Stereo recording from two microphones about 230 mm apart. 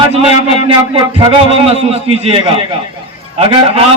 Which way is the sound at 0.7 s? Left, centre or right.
Right.